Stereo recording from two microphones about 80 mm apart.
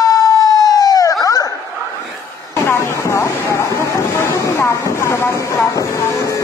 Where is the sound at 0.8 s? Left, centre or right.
Left.